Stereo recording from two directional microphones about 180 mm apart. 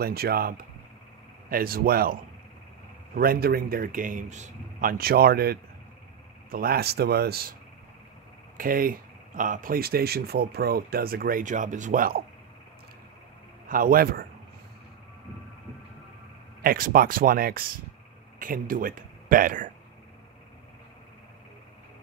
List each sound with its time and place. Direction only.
0.0 s speech: 60° right (ahead or behind)
3.2 s speech: 55° right (ahead or behind)
8.5 s speech: 50° right (ahead or behind)
13.7 s speech: 50° right (ahead or behind)
16.6 s speech: 55° right (ahead or behind)